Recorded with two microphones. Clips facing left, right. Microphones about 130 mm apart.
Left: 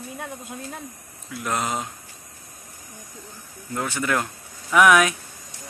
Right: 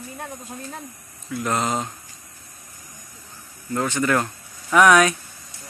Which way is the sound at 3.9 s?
5° left (ahead or behind).